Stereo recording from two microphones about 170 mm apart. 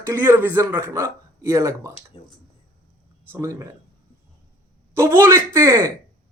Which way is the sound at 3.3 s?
15° right (ahead or behind).